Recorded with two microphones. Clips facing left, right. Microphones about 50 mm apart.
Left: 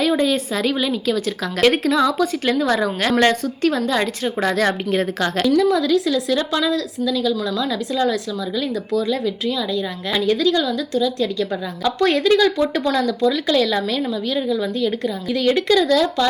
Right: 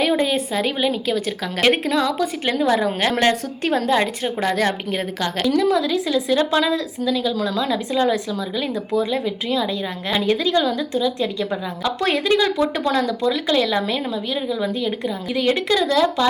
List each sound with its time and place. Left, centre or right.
0.1 s speech: centre
3.7 s speech: right
10.9 s speech: centre